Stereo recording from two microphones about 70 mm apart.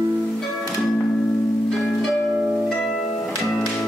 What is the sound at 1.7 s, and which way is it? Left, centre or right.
Music, centre.